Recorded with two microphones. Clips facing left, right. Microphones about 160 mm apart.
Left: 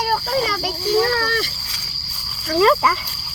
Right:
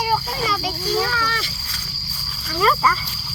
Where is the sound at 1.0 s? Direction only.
50° left (ahead or behind).